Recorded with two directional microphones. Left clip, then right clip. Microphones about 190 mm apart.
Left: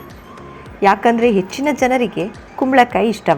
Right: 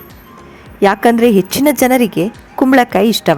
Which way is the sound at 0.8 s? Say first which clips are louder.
Right 2 dB; 40° right (ahead or behind).